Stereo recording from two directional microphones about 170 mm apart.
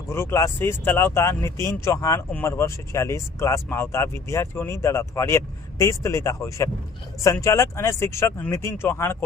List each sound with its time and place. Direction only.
0.1 s speech: 15° left (ahead or behind)